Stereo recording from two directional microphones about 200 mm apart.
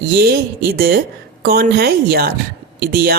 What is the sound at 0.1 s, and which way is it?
Speech, 50° right (ahead or behind).